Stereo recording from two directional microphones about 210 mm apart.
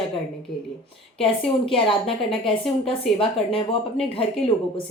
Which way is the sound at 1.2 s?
25° left (ahead or behind).